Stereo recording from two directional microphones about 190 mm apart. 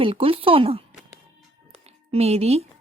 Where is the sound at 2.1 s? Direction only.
35° right (ahead or behind).